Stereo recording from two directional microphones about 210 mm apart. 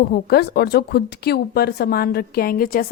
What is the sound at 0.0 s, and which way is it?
A woman's voice, 45° left (ahead or behind).